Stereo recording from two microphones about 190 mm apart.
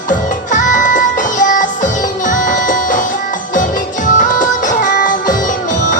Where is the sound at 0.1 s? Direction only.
45° left (ahead or behind).